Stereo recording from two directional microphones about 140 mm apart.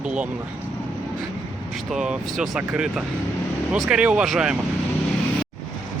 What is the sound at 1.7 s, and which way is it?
Speech, 5° right (ahead or behind).